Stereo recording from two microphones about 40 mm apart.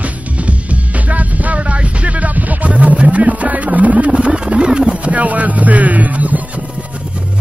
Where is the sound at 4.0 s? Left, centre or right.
Right.